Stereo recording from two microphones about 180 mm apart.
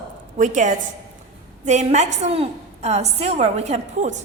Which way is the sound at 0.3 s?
45° right (ahead or behind).